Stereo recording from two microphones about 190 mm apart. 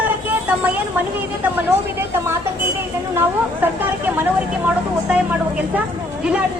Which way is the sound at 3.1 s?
10° right (ahead or behind).